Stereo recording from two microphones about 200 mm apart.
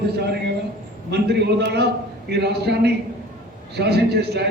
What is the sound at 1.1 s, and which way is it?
A man's voice, 55° right (ahead or behind).